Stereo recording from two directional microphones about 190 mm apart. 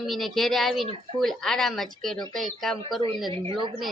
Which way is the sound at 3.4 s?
25° right (ahead or behind).